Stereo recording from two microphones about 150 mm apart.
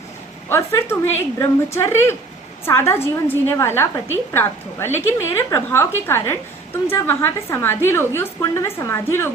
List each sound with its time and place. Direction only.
0.4 s a woman's voice: 15° left (ahead or behind)